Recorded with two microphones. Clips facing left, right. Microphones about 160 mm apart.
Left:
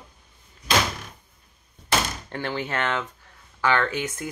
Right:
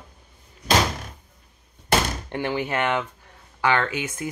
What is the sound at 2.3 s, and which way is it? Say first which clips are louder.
Speech: right 4 dB; 15° right (ahead or behind).